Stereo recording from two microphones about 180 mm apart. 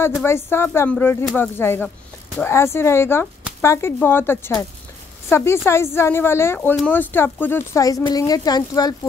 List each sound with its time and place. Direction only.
0.2 s speech: 15° left (ahead or behind)